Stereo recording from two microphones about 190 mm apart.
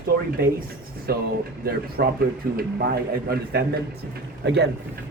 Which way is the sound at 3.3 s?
55° right (ahead or behind).